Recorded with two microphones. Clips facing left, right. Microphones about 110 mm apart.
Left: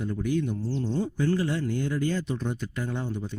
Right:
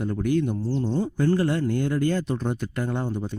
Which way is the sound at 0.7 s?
35° right (ahead or behind).